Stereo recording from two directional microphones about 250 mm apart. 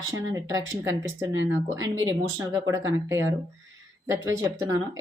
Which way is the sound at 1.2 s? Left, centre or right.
Right.